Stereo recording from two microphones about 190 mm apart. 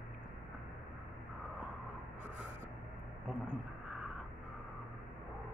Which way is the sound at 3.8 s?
Centre (ahead or behind).